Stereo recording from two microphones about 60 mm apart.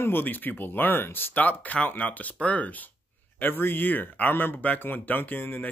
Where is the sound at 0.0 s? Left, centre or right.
Left.